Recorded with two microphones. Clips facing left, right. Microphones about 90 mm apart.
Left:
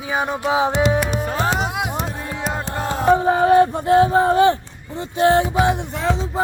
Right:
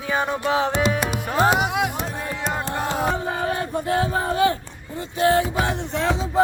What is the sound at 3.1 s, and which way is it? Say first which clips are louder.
Speech: left 11 dB; 30° left (ahead or behind).